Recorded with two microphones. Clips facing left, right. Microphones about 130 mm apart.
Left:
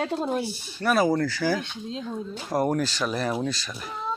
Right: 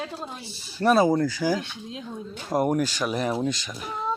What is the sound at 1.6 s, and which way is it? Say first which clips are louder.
Speech: left 3 dB; 25° left (ahead or behind).